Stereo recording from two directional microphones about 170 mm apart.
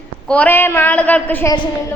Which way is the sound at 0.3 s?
10° left (ahead or behind).